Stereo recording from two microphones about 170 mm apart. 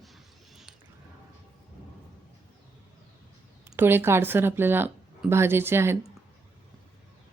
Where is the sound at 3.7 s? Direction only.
15° right (ahead or behind).